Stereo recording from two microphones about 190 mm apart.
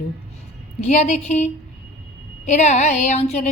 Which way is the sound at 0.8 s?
40° left (ahead or behind).